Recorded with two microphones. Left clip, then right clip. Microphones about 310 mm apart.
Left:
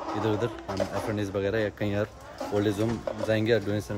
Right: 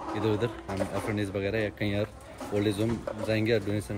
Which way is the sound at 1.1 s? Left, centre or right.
Centre.